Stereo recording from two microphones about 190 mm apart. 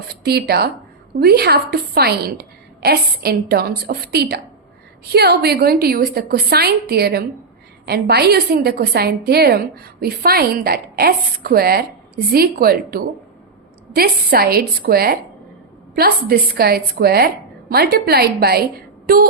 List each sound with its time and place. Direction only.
0.3 s a woman's voice: 55° right (ahead or behind)